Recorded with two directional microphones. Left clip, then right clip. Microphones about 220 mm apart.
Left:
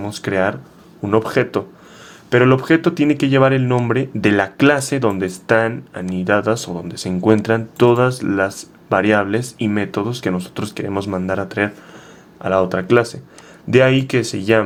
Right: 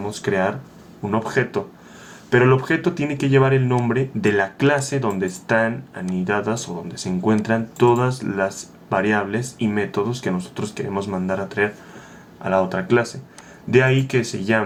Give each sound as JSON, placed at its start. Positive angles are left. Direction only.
{"t": 0.0, "sound": "speech", "side_deg": 45}